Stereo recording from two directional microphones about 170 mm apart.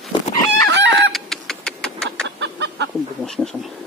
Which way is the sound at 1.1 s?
Centre (ahead or behind).